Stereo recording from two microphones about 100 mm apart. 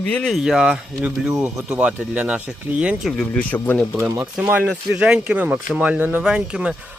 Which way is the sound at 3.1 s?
15° left (ahead or behind).